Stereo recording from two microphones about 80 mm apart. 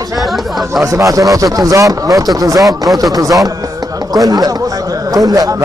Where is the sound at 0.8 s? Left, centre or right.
Right.